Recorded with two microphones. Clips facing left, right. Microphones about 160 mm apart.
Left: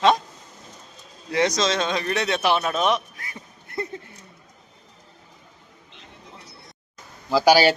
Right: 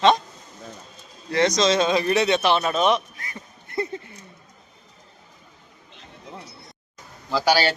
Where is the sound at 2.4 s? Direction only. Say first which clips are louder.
Right 1 dB; 10° left (ahead or behind).